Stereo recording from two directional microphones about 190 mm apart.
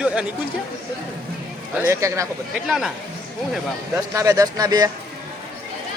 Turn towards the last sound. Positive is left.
turn(degrees=-20)  # may be behind; listen again after turning